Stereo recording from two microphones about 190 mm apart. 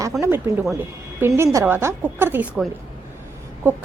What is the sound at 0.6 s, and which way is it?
Speech, centre (ahead or behind).